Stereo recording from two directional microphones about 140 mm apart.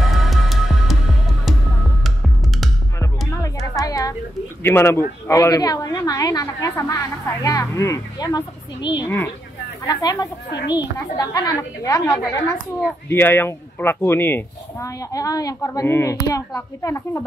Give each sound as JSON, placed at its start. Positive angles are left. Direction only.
{"t": 0.0, "sound": "music", "side_deg": 0}
{"t": 3.7, "sound": "a sound", "side_deg": 25}
{"t": 4.6, "sound": "a woman's voice", "side_deg": 15}
{"t": 13.1, "sound": "a woman's voice", "side_deg": 15}